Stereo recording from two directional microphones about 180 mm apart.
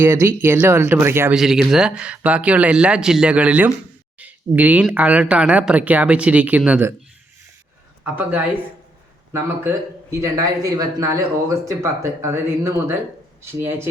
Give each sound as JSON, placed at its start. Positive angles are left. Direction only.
{"t": 0.0, "sound": "speech", "side_deg": -15}
{"t": 1.4, "sound": "speech", "side_deg": 0}
{"t": 8.0, "sound": "speech", "side_deg": -10}
{"t": 9.6, "sound": "speech", "side_deg": -15}